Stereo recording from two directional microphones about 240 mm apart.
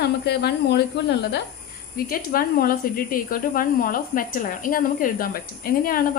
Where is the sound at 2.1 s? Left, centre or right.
Left.